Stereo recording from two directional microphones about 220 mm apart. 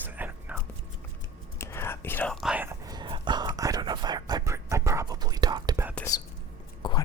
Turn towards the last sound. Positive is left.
turn(degrees=20)  # may be behind; listen again after turning